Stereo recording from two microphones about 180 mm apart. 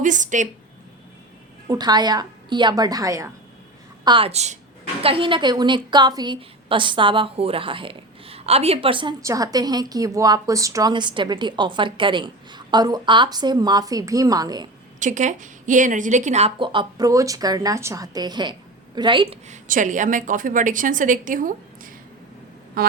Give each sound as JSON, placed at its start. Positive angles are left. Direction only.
{"t": 0.0, "sound": "a woman's voice", "side_deg": -45}
{"t": 1.6, "sound": "a woman's voice", "side_deg": -20}
{"t": 4.0, "sound": "a woman's voice", "side_deg": -30}
{"t": 14.9, "sound": "a woman's voice", "side_deg": -45}
{"t": 19.5, "sound": "a woman's voice", "side_deg": -45}
{"t": 22.8, "sound": "music", "side_deg": -55}